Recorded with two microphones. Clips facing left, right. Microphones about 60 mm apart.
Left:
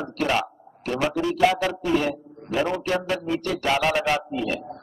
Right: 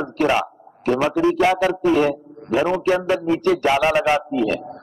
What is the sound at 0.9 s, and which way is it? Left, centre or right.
Speech, right.